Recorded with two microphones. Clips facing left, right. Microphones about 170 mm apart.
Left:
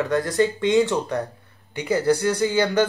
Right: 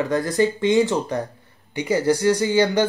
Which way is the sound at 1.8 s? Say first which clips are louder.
Right 1 dB; centre (ahead or behind).